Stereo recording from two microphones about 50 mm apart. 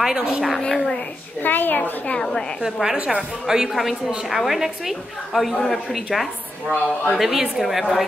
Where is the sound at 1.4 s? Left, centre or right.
Left.